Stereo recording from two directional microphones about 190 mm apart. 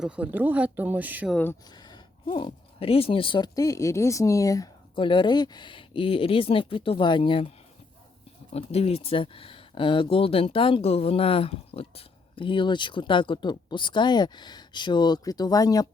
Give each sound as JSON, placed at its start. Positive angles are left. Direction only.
{"t": 0.0, "sound": "speech", "side_deg": -10}
{"t": 1.3, "sound": "speech", "side_deg": 10}
{"t": 1.7, "sound": "speech", "side_deg": 25}
{"t": 8.5, "sound": "speech", "side_deg": 30}